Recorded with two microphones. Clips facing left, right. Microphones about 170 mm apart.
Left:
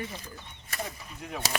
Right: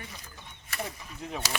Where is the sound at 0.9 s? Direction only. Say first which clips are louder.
Right 1 dB; 30° right (ahead or behind).